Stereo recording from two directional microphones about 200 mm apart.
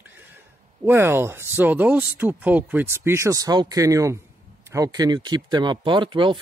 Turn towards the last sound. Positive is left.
turn(degrees=-25)  # may be behind; listen again after turning